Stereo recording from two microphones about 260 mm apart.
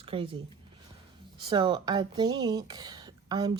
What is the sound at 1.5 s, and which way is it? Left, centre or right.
Speech, centre.